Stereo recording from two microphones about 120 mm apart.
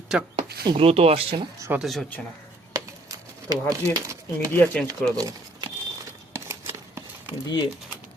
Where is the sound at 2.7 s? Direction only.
30° right (ahead or behind).